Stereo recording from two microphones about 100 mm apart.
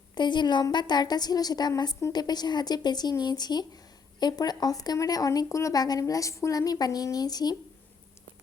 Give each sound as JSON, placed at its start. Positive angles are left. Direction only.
{"t": 0.1, "sound": "a woman's voice", "side_deg": 50}